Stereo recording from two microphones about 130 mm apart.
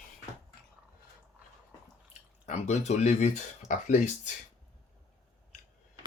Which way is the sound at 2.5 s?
60° left (ahead or behind).